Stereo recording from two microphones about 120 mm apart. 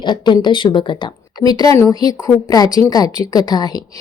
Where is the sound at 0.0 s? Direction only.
40° left (ahead or behind).